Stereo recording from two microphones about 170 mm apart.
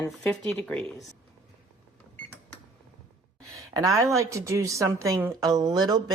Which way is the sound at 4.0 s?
15° right (ahead or behind).